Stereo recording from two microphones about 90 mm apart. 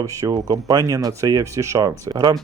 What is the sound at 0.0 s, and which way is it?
Speech, 40° right (ahead or behind).